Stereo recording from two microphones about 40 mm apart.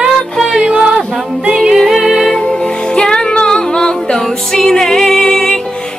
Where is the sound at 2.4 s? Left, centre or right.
Left.